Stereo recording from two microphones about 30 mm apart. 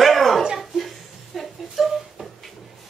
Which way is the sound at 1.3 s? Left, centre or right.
Centre.